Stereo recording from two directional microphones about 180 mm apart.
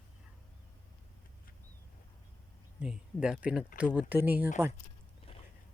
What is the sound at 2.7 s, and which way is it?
Speech, 5° right (ahead or behind).